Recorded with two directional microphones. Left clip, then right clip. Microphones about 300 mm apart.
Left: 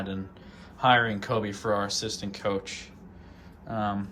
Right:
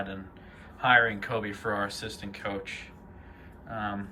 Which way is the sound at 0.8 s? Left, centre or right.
Centre.